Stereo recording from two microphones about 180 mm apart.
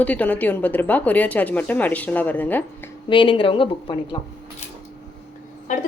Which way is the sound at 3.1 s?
30° left (ahead or behind).